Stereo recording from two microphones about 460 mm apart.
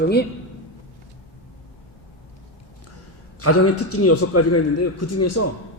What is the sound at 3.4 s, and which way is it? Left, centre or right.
A man's voice, left.